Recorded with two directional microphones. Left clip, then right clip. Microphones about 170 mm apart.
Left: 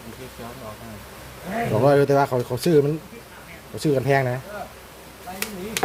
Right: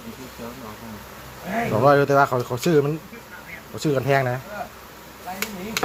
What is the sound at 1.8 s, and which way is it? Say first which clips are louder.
Speech: right 1 dB; 25° left (ahead or behind).